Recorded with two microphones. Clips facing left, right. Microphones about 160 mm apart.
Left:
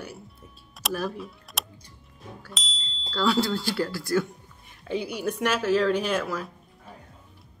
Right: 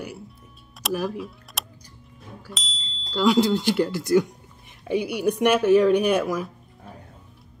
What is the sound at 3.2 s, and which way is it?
Speech, 15° right (ahead or behind).